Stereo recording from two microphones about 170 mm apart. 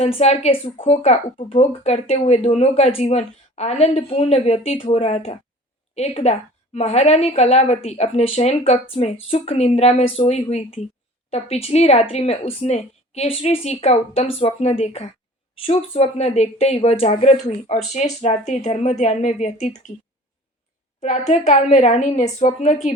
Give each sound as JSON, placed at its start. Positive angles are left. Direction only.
{"t": 0.0, "sound": "a woman's voice", "side_deg": 40}
{"t": 21.0, "sound": "a woman's voice", "side_deg": 45}